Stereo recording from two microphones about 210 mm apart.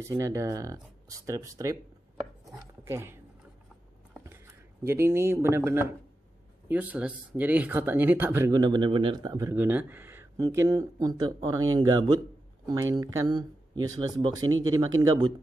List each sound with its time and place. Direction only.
0.0 s speech: 15° right (ahead or behind)
2.8 s speech: 10° right (ahead or behind)
4.1 s a sound: 10° right (ahead or behind)
4.8 s speech: 10° right (ahead or behind)